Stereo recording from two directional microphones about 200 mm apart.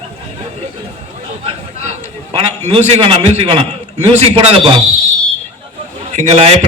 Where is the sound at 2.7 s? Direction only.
30° right (ahead or behind).